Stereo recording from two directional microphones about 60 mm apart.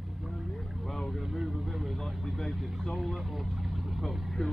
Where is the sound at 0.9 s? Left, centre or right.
Centre.